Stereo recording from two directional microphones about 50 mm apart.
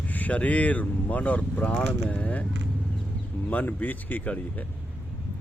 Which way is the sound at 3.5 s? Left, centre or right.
Left.